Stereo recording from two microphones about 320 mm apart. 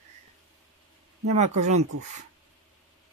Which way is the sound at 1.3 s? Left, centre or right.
Right.